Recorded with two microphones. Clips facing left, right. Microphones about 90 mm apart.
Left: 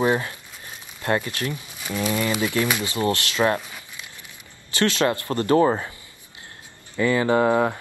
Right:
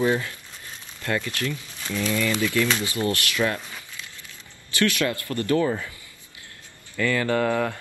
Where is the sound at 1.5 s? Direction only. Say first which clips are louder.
Left 1 dB; 15° left (ahead or behind).